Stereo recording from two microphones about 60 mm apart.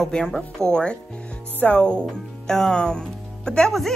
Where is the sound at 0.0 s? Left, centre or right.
Centre.